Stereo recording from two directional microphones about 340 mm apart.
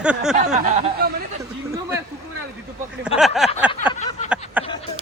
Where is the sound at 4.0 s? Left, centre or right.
Centre.